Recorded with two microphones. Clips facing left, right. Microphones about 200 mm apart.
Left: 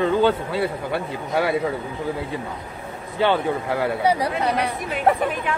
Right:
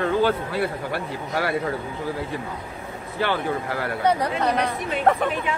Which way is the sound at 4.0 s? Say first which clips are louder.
Left 1 dB; 10° left (ahead or behind).